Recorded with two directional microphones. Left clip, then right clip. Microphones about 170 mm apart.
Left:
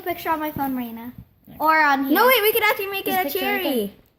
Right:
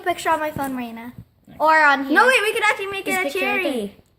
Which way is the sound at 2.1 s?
45° left (ahead or behind).